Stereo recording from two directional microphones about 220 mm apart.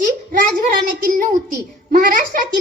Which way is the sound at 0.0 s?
40° right (ahead or behind).